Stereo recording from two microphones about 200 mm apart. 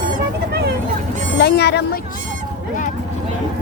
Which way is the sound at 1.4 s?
55° left (ahead or behind).